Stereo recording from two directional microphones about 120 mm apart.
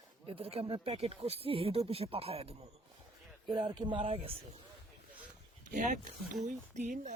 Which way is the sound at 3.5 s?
40° right (ahead or behind).